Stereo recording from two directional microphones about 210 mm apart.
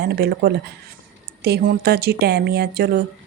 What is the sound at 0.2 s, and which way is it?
Speech, 50° right (ahead or behind).